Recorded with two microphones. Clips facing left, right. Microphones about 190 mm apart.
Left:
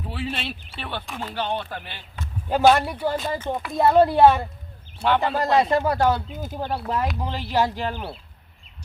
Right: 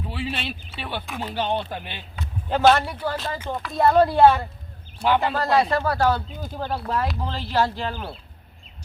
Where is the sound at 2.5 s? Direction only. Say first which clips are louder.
Left 1 dB; 10° left (ahead or behind).